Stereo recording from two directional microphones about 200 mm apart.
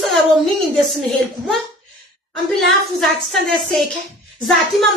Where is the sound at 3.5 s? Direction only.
Centre (ahead or behind).